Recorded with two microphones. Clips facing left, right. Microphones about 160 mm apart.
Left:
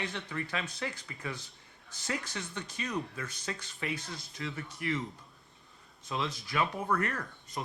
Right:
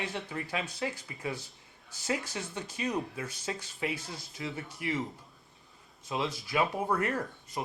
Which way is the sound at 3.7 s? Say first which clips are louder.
Right 2 dB; 15° right (ahead or behind).